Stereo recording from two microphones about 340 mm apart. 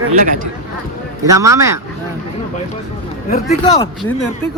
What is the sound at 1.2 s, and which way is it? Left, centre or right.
Speech, centre.